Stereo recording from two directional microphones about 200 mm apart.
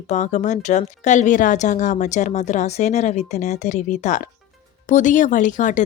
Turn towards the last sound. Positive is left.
turn(degrees=40)  # may be behind; listen again after turning